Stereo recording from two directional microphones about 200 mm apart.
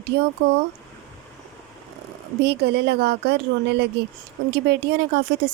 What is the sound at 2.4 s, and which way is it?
Speech, 55° right (ahead or behind).